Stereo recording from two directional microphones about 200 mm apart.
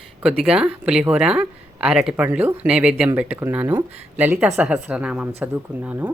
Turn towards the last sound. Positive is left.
turn(degrees=-10)  # may be behind; listen again after turning